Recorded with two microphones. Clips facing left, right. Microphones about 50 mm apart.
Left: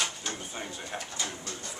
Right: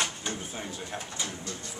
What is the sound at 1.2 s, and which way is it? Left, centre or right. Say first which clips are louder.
Speech: even; left.